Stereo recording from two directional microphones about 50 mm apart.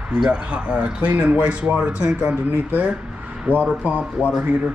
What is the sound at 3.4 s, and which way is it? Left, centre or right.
Speech, right.